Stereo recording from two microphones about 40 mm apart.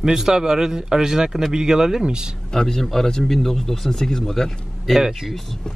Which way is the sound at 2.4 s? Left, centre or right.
Centre.